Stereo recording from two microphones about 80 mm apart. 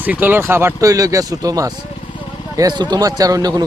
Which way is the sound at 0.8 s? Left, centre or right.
Right.